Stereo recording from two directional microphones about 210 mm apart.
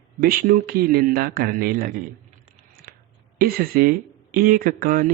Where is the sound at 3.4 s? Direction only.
45° right (ahead or behind).